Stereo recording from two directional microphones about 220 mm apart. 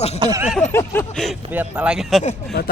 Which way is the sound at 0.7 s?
10° left (ahead or behind).